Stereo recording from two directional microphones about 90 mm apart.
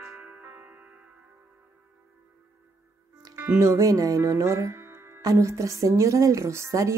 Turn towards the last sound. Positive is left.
turn(degrees=-35)  # may be behind; listen again after turning